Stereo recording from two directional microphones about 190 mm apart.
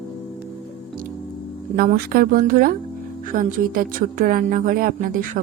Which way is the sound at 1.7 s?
50° right (ahead or behind).